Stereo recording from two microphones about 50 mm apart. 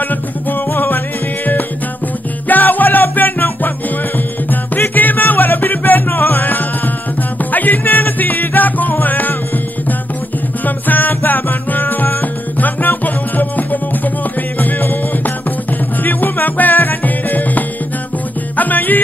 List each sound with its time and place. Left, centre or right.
0.1 s music: left
10.6 s music: left